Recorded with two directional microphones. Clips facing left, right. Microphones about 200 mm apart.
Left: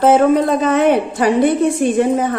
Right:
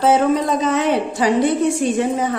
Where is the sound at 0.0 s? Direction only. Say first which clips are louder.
Left 4 dB; 55° left (ahead or behind).